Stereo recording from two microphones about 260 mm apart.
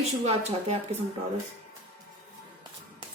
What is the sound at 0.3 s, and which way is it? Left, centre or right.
Speech, right.